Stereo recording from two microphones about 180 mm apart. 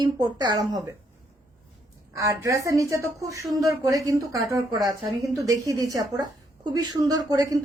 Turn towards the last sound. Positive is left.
turn(degrees=-20)  # may be behind; listen again after turning